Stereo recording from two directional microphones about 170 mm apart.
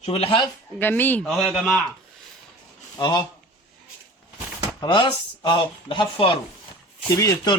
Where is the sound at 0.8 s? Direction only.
10° left (ahead or behind).